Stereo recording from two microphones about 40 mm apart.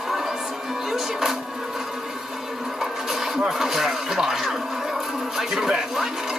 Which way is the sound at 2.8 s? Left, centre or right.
Centre.